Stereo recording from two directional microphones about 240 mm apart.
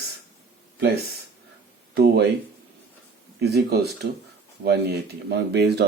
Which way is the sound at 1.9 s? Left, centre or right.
Right.